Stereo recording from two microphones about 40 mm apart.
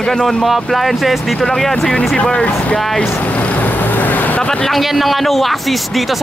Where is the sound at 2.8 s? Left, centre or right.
Centre.